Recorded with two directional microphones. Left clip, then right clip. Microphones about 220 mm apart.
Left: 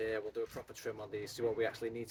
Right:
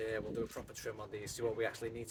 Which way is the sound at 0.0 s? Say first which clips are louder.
Left 1 dB; 5° right (ahead or behind).